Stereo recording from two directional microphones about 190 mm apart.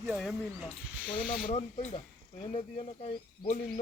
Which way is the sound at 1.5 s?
35° left (ahead or behind).